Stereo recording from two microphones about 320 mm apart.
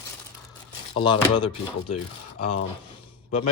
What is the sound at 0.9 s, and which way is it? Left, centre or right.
Speech, centre.